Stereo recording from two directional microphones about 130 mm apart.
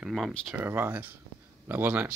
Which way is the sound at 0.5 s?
15° right (ahead or behind).